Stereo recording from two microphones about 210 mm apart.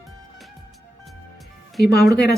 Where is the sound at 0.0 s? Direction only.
Centre (ahead or behind).